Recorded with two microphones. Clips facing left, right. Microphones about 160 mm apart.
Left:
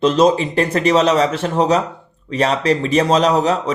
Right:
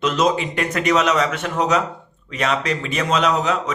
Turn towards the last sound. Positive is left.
turn(degrees=35)  # may be behind; listen again after turning